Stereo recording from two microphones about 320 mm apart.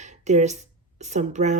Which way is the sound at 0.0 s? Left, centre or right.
Right.